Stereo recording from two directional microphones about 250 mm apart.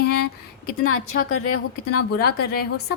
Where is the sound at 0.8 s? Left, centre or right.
Left.